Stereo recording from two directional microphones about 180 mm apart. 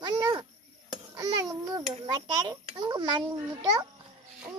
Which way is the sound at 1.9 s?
25° right (ahead or behind).